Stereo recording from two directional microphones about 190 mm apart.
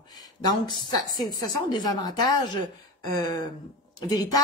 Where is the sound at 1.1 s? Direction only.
20° left (ahead or behind).